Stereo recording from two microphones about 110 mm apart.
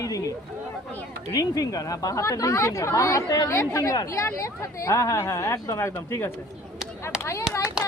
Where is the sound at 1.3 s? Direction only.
35° left (ahead or behind).